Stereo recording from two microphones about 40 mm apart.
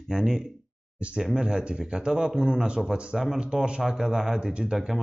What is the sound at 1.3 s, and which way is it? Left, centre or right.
Speech, centre.